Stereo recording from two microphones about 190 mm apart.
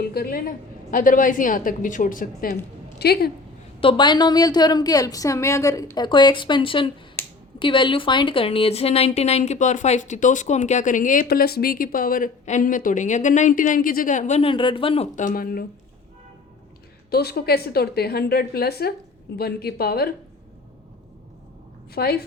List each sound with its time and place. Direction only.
0.0 s a woman's voice: 55° left (ahead or behind)
3.8 s a woman's voice: 25° left (ahead or behind)
7.2 s finger snapping: 10° left (ahead or behind)
7.6 s a woman's voice: 25° left (ahead or behind); by 15.6 s 50° left (ahead or behind)
17.1 s a woman's voice: 55° left (ahead or behind)
21.9 s a woman's voice: 55° left (ahead or behind)